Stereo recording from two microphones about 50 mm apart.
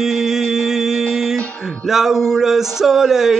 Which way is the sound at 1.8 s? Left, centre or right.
Centre.